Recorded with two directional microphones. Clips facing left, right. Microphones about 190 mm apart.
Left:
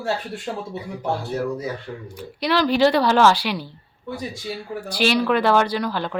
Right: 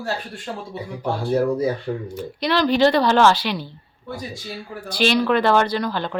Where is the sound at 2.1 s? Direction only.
10° left (ahead or behind).